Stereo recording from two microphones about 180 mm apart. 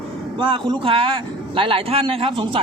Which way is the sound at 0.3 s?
30° right (ahead or behind).